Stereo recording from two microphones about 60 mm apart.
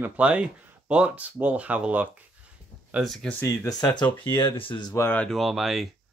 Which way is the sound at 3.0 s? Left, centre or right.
Centre.